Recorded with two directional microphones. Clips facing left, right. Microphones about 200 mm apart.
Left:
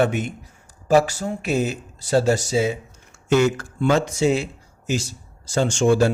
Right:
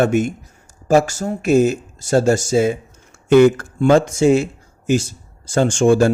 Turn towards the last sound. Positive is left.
turn(degrees=-50)  # may be behind; listen again after turning